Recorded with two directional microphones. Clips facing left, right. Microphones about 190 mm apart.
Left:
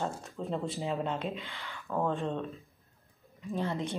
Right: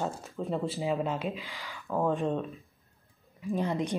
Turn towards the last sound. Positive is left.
turn(degrees=-15)  # may be behind; listen again after turning